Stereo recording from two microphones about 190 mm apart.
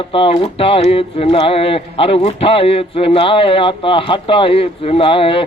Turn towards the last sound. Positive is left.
turn(degrees=30)  # may be behind; listen again after turning